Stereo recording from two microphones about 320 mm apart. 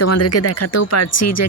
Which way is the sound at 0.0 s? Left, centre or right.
Left.